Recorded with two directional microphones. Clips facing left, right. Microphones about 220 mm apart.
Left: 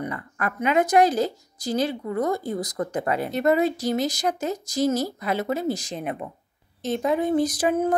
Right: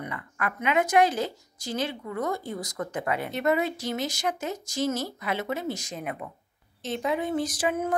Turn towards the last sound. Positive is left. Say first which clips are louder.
# left 5 dB
turn(degrees=40)  # may be behind; listen again after turning